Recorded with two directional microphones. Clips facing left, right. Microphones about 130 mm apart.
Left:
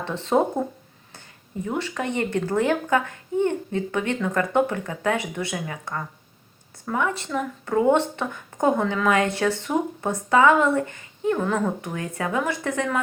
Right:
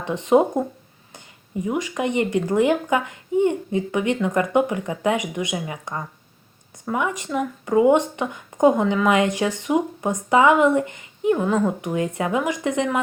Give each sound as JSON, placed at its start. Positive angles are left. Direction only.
{"t": 0.0, "sound": "speech", "side_deg": -15}
{"t": 1.6, "sound": "speech", "side_deg": -10}